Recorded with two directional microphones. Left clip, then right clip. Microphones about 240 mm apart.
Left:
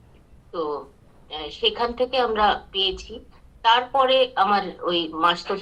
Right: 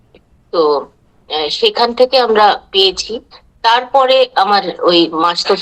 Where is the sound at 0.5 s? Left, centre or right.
Right.